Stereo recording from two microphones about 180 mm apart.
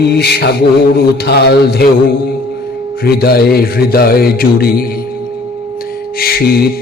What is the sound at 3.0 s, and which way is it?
Mantra, 60° left (ahead or behind).